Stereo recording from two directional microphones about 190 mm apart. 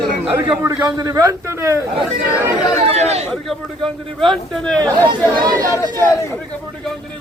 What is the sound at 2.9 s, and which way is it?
Speech, 35° right (ahead or behind).